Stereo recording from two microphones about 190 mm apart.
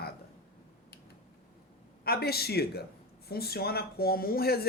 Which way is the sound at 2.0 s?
55° left (ahead or behind).